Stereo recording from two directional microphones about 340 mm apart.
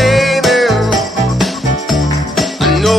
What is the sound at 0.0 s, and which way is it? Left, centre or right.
Music, centre.